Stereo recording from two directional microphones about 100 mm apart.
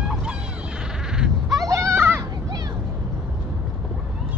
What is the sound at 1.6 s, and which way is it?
Goat, 35° right (ahead or behind).